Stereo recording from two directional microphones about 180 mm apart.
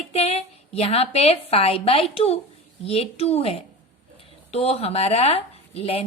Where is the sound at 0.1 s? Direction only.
35° left (ahead or behind).